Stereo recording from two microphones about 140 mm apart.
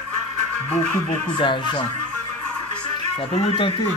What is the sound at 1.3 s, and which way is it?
Speech, 30° left (ahead or behind).